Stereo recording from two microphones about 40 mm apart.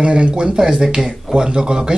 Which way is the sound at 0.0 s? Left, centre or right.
Right.